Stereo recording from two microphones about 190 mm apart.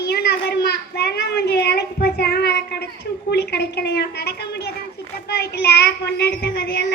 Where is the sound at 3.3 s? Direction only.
60° left (ahead or behind).